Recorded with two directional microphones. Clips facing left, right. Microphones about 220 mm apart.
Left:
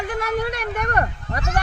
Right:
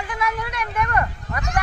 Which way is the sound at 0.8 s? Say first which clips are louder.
Left 1 dB; 40° left (ahead or behind).